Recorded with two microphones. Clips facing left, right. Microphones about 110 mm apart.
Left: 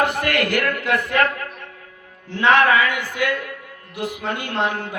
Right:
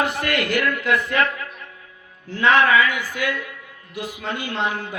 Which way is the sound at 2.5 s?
55° left (ahead or behind).